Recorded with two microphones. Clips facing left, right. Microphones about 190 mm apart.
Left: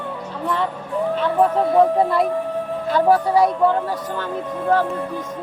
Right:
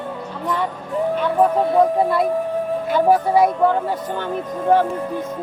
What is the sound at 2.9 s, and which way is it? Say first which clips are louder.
Speech: even; 15° right (ahead or behind).